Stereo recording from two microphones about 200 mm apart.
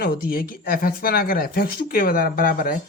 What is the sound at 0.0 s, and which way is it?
Speech, 45° left (ahead or behind).